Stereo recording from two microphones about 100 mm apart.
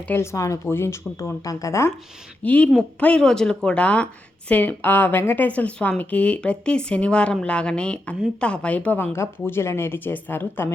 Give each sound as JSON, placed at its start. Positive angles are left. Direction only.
{"t": 0.1, "sound": "speech", "side_deg": 25}
{"t": 2.4, "sound": "a woman's voice", "side_deg": 15}
{"t": 9.1, "sound": "speech", "side_deg": 25}